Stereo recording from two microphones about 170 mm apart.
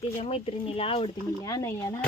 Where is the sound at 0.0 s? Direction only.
35° left (ahead or behind).